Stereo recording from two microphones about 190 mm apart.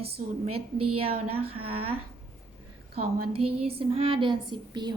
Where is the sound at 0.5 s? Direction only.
30° right (ahead or behind).